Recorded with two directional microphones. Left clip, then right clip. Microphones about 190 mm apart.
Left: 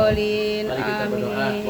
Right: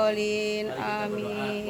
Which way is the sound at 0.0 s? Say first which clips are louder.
Left 6 dB; 15° right (ahead or behind).